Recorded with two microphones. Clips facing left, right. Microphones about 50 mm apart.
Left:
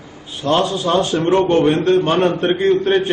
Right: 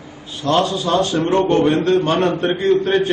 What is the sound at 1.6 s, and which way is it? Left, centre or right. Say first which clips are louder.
A man's voice: left 1 dB; centre.